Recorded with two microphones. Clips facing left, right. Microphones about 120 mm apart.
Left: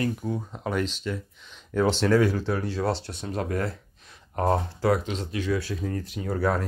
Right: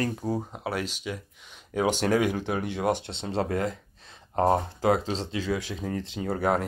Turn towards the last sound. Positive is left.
turn(degrees=-20)  # may be behind; listen again after turning